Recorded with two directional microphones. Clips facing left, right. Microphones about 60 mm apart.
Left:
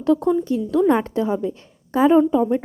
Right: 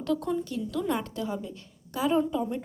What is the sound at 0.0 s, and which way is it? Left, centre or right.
A woman's voice, left.